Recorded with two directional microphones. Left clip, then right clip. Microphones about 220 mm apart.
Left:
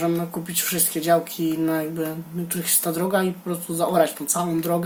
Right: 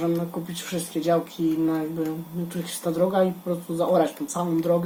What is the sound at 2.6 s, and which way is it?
Speech, 30° left (ahead or behind).